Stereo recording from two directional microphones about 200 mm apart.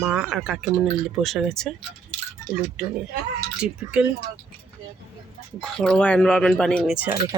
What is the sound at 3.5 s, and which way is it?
Speech, 5° right (ahead or behind).